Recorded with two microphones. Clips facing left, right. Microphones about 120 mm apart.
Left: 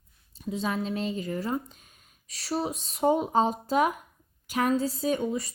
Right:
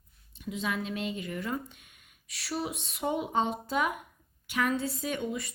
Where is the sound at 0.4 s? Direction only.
35° left (ahead or behind).